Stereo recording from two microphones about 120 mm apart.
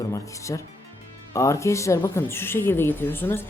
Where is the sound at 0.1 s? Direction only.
25° left (ahead or behind).